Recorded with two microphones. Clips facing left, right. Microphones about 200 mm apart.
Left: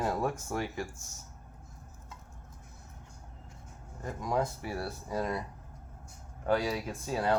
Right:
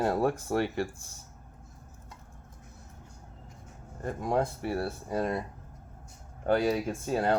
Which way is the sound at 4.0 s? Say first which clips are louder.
Right 4 dB; 55° right (ahead or behind).